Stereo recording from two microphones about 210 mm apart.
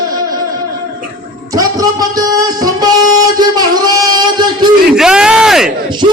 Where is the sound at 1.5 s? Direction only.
15° right (ahead or behind).